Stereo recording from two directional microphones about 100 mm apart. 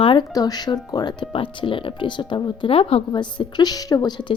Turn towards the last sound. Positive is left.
turn(degrees=45)  # may be behind; listen again after turning